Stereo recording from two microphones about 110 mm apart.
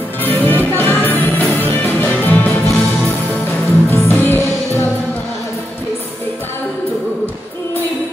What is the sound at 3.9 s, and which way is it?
Music, 20° left (ahead or behind).